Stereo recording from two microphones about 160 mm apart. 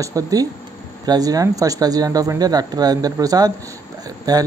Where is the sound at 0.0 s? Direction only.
20° right (ahead or behind).